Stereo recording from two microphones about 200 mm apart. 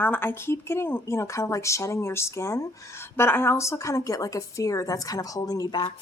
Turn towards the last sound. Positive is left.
turn(degrees=25)  # may be behind; listen again after turning